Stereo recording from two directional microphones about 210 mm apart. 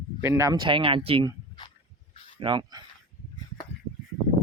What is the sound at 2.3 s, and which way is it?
Speech, 20° right (ahead or behind).